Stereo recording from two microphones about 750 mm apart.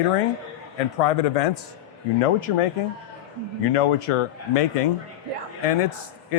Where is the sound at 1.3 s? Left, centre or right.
Left.